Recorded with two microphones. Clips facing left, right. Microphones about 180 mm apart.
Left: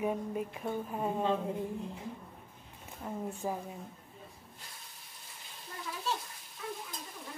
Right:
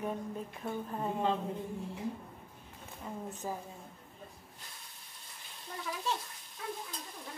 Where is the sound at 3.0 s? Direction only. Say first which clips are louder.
Left 3 dB; 5° left (ahead or behind).